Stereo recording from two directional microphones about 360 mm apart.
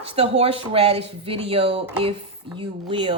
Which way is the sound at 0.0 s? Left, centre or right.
Centre.